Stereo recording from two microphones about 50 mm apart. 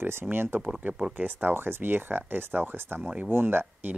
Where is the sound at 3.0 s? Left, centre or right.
Right.